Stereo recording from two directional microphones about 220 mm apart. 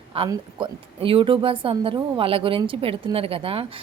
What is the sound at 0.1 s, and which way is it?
A woman's voice, 25° right (ahead or behind).